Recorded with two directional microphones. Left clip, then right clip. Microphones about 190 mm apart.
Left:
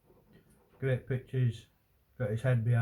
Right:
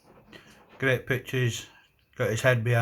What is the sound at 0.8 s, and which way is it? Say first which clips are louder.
Speech: right 9 dB; 50° right (ahead or behind).